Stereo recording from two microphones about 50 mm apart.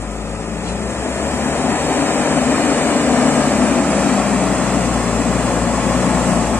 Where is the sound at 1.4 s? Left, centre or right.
Left.